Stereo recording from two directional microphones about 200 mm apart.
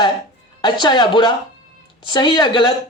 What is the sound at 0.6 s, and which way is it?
Speech, 20° left (ahead or behind).